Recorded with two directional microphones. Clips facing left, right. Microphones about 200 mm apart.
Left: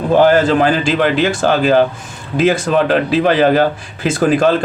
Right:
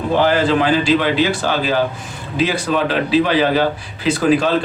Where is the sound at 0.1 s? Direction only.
45° left (ahead or behind).